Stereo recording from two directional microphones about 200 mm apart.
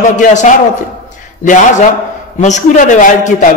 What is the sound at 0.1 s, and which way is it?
A man's voice, 40° left (ahead or behind).